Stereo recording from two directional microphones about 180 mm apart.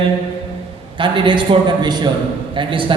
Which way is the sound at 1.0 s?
25° right (ahead or behind).